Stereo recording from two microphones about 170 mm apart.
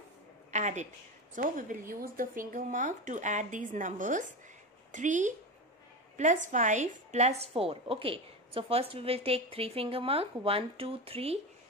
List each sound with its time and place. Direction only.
0.5 s a woman's voice: 45° right (ahead or behind)